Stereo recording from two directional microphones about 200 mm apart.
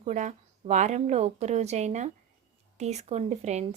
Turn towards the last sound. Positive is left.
turn(degrees=-35)  # may be behind; listen again after turning